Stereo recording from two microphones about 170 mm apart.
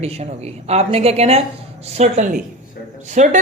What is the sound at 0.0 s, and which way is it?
Speech, 40° right (ahead or behind).